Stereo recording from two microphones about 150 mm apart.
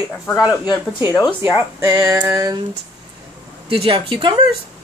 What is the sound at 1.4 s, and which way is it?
Speech, 10° right (ahead or behind).